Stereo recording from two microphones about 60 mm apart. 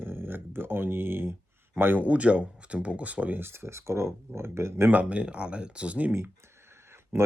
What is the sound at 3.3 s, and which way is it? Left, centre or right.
Speech, right.